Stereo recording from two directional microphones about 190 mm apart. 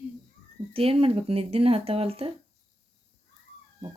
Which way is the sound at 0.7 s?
30° right (ahead or behind).